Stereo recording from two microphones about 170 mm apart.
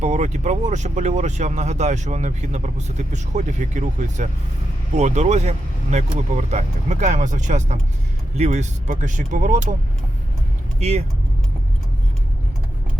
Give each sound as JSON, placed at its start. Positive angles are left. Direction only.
{"t": 0.0, "sound": "speech", "side_deg": -45}
{"t": 10.8, "sound": "speech", "side_deg": -40}